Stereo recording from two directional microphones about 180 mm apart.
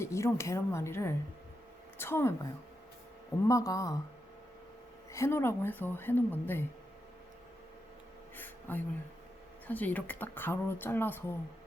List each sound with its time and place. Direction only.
0.0 s speech: 15° left (ahead or behind)
3.4 s speech: 20° left (ahead or behind)
5.1 s speech: 15° left (ahead or behind)
8.4 s a sound: 10° left (ahead or behind)
9.6 s speech: 10° left (ahead or behind)